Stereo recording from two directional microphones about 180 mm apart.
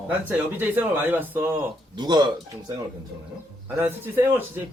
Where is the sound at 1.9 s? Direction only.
25° right (ahead or behind).